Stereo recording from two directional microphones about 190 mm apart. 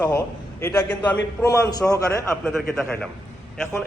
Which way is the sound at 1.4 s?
15° left (ahead or behind).